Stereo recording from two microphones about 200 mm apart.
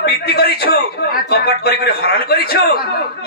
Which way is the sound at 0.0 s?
55° left (ahead or behind).